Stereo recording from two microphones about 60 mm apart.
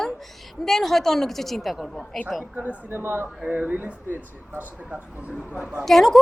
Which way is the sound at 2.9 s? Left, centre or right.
Right.